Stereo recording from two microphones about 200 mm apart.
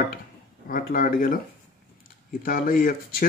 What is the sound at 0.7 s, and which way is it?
Speech, 45° left (ahead or behind).